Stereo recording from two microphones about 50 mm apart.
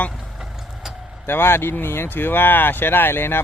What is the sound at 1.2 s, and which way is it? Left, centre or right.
Speech, left.